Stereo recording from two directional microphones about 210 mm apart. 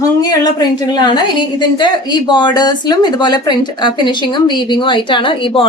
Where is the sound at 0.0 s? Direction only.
20° left (ahead or behind).